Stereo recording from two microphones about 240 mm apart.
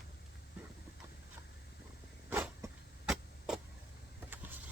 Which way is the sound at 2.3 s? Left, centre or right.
Centre.